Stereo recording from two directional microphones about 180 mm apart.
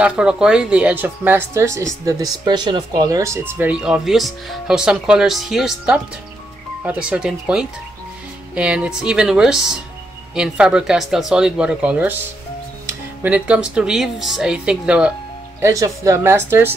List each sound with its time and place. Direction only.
0.0 s speech: 5° right (ahead or behind)
13.2 s speech: 5° right (ahead or behind)
15.6 s speech: 15° right (ahead or behind)